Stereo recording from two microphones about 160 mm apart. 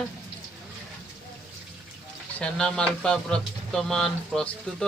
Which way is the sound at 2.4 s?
5° left (ahead or behind).